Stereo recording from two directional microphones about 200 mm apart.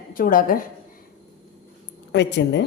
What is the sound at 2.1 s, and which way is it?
Speech, 60° left (ahead or behind).